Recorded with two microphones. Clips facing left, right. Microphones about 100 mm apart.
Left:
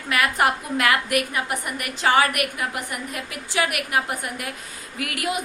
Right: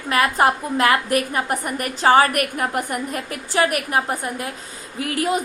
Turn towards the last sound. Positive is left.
turn(degrees=-30)  # may be behind; listen again after turning